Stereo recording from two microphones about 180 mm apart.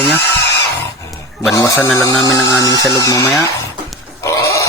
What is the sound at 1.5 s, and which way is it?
Speech, 20° left (ahead or behind).